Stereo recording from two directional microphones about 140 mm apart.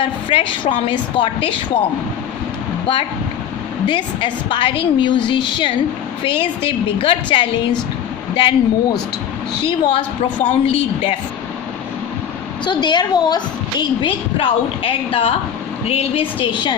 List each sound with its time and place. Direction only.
0.0 s a woman's voice: 40° left (ahead or behind)
7.0 s a woman's voice: 40° left (ahead or behind)
10.4 s a woman's voice: 40° left (ahead or behind)
12.6 s a woman's voice: 35° left (ahead or behind)